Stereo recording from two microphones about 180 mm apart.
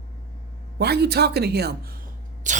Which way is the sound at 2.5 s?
45° right (ahead or behind).